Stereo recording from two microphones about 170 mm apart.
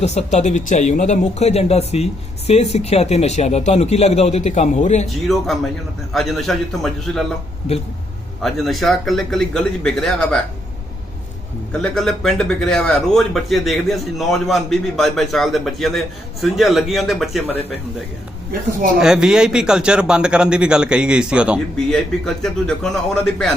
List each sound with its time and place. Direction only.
0.0 s a man's voice: 40° left (ahead or behind)
5.0 s speech: centre (ahead or behind)
8.4 s speech: centre (ahead or behind)
11.8 s speech: centre (ahead or behind)
18.9 s speech: 5° right (ahead or behind)